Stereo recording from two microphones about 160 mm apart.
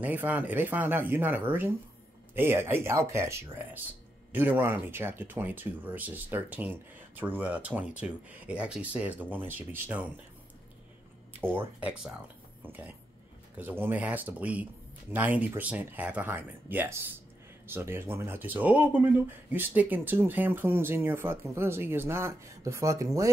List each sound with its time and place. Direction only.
0.0 s speech: 10° right (ahead or behind)
11.4 s speech: 10° right (ahead or behind)
13.6 s speech: 15° right (ahead or behind)